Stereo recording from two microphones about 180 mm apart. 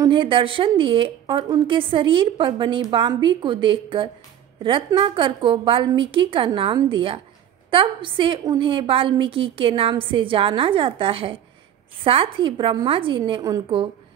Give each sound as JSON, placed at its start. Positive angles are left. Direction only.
{"t": 0.0, "sound": "a woman's voice", "side_deg": -25}